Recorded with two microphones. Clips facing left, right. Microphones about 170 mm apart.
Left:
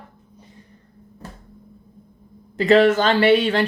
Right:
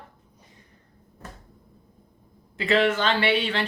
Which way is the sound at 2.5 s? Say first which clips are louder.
Left 8 dB; 40° left (ahead or behind).